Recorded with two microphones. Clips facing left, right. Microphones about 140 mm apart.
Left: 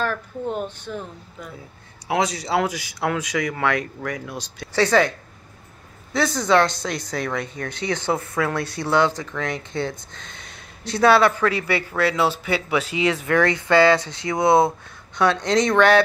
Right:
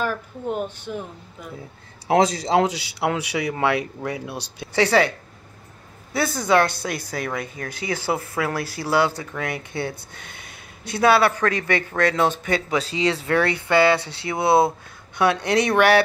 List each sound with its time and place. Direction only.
0.0 s speech: 10° right (ahead or behind)
2.0 s a man's voice: 30° right (ahead or behind); by 5.1 s 10° right (ahead or behind)
6.1 s speech: 5° right (ahead or behind)
8.2 s a man's voice: 30° right (ahead or behind)
8.8 s speech: 10° right (ahead or behind)
10.5 s a sound: 55° right (ahead or behind)
11.0 s a man's voice: 20° right (ahead or behind)
11.6 s a man's voice: 45° right (ahead or behind); by 14.4 s 25° right (ahead or behind)
15.4 s speech: 10° right (ahead or behind)